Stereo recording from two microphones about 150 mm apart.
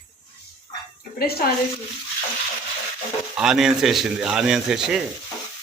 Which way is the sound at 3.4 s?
5° right (ahead or behind).